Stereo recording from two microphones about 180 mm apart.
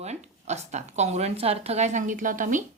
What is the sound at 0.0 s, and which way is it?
A woman's voice, 40° right (ahead or behind).